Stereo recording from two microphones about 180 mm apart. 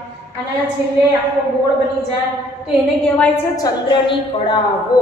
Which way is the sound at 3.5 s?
25° left (ahead or behind).